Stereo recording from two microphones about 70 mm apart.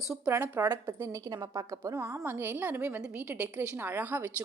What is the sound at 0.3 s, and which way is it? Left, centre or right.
A woman's voice, right.